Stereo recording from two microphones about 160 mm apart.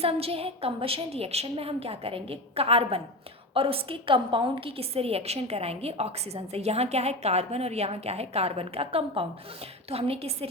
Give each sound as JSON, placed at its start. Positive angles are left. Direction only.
{"t": 0.0, "sound": "a woman's voice", "side_deg": -35}